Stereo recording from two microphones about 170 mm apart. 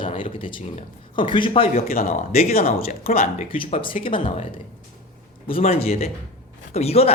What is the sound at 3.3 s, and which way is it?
Speech, 30° left (ahead or behind).